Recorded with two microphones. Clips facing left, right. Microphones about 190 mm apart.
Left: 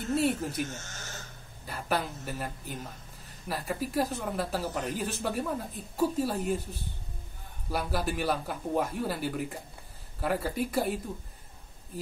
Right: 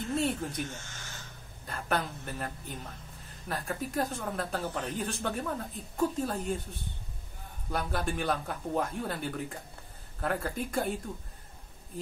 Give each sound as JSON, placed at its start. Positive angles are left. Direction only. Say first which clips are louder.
{"t": 0.1, "sound": "speech", "louder": "left 4 dB", "side_deg": 5}
{"t": 0.8, "sound": "a sound", "louder": "left 3 dB", "side_deg": 40}
{"t": 1.7, "sound": "speech", "louder": "left 1 dB", "side_deg": 5}
{"t": 7.7, "sound": "speech", "louder": "left 1 dB", "side_deg": 5}